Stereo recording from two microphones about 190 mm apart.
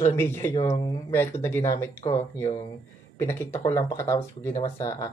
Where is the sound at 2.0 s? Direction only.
30° left (ahead or behind).